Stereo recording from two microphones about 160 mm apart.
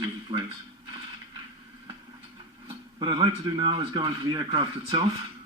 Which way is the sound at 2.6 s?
30° right (ahead or behind).